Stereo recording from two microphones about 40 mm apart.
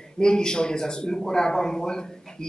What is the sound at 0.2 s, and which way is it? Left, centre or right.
A man's voice, centre.